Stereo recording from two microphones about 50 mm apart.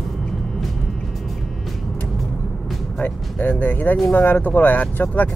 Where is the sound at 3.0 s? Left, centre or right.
Left.